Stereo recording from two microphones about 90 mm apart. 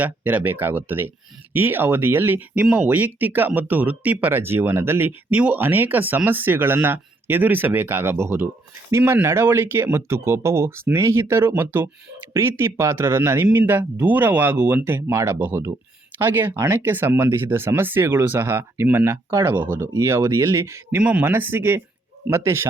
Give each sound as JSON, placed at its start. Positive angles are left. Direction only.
{"t": 0.0, "sound": "speech", "side_deg": -20}
{"t": 21.0, "sound": "speech", "side_deg": -15}